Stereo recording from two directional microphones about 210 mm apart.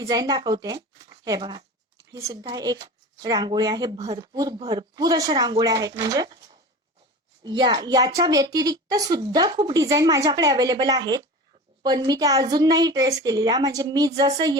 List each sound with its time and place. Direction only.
0.0 s a woman's voice: 20° right (ahead or behind)